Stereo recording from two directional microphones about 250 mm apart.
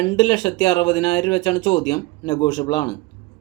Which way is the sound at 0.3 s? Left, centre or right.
Centre.